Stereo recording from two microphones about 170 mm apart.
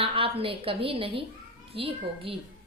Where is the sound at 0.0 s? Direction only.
30° right (ahead or behind).